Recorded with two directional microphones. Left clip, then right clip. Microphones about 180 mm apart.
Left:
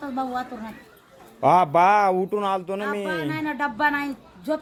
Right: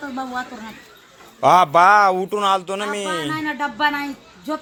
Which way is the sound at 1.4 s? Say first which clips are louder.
Right 4 dB; 10° left (ahead or behind).